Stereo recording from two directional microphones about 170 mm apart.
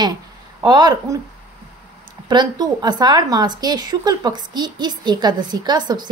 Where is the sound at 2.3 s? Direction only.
25° right (ahead or behind).